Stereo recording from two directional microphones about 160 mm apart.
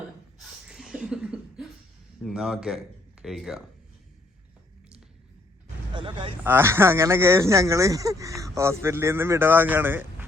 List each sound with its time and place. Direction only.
0.7 s a sound: 5° right (ahead or behind)
2.2 s speech: 5° right (ahead or behind)
5.9 s speech: 30° right (ahead or behind)
6.4 s speech: 15° right (ahead or behind)